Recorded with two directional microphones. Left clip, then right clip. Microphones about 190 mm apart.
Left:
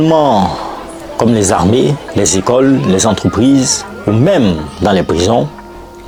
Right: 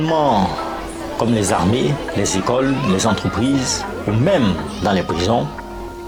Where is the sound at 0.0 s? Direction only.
50° left (ahead or behind).